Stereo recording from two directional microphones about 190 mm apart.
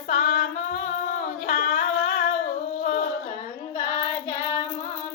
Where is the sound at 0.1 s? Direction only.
40° left (ahead or behind).